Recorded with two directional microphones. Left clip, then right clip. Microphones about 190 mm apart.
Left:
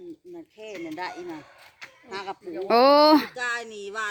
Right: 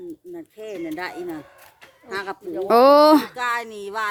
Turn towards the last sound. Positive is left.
turn(degrees=-45)  # may be behind; listen again after turning